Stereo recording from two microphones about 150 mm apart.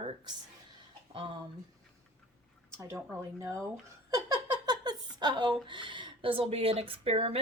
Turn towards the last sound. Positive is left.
turn(degrees=-40)  # may be behind; listen again after turning